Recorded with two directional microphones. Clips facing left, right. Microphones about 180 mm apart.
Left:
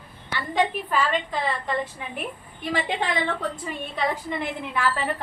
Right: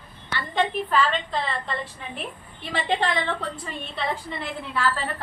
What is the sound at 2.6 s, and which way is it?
Speech, 10° left (ahead or behind).